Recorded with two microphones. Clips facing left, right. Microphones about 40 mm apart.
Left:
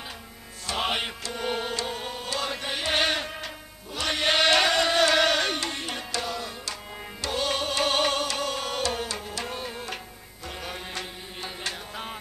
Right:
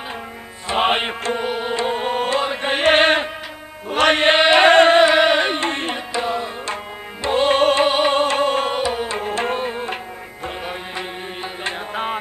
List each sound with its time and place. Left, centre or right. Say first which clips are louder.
0.7 s music: right 9 dB; right
1.4 s music: right 3 dB; centre; by 2.4 s right
2.4 s music: right 9 dB; right
2.7 s chant: right 12 dB; right
3.9 s music: right 11 dB; right
4.6 s music: right 12 dB; right
5.0 s music: right 7 dB; right
5.7 s music: right 9 dB; right
5.9 s music: right 9 dB; right
7.8 s music: right 8 dB; right
8.7 s music: right 7 dB; right
9.2 s music: right 12 dB; right
11.6 s music: right 12 dB; right